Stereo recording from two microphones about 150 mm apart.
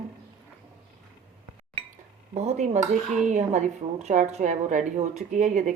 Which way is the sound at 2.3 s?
45° right (ahead or behind).